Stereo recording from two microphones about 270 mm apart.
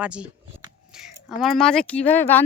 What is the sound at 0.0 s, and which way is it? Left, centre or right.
Speech, centre.